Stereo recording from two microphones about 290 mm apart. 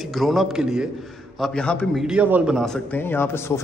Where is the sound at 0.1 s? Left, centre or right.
Centre.